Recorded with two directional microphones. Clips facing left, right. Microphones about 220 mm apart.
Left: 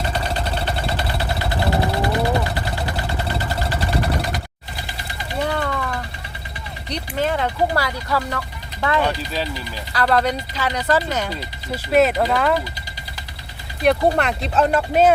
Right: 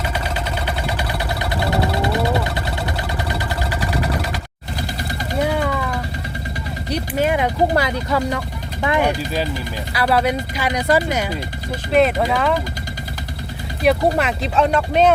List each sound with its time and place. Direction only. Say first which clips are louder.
0.1 s vehicle: even; 10° right (ahead or behind)
1.5 s vehicle: right 1 dB; 20° right (ahead or behind)
5.4 s a sound: right 3 dB; 10° right (ahead or behind)
6.9 s speech: right 3 dB; 10° right (ahead or behind)
11.9 s speech: even; centre (ahead or behind)
13.8 s speech: even; centre (ahead or behind)